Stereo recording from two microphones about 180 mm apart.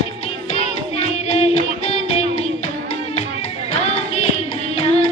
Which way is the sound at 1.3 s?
35° left (ahead or behind).